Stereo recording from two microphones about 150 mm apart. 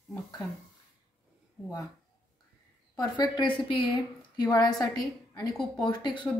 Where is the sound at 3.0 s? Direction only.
25° left (ahead or behind).